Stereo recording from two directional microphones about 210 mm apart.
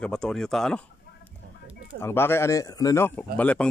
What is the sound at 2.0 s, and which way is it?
Speech, 10° left (ahead or behind).